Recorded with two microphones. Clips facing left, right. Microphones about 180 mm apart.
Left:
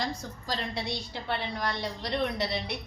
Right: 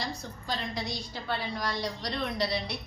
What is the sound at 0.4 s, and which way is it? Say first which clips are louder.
A woman's voice: left 1 dB; 25° left (ahead or behind).